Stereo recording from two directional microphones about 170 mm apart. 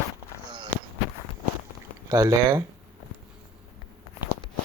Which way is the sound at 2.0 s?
20° right (ahead or behind).